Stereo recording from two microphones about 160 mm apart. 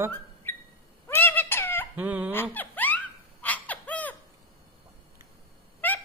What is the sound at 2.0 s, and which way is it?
Speech, 10° right (ahead or behind).